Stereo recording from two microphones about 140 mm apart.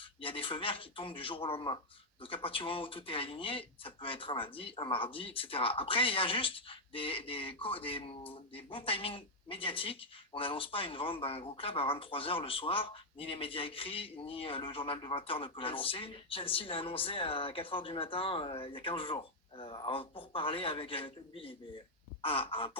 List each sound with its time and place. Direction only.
0.0 s speech: 40° left (ahead or behind)